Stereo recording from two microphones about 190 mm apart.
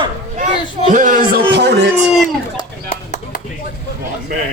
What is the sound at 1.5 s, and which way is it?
Speech, 65° right (ahead or behind).